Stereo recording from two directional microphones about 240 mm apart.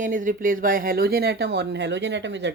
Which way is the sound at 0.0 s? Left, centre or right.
Right.